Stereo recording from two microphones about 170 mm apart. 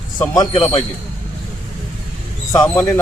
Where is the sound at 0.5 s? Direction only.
35° left (ahead or behind).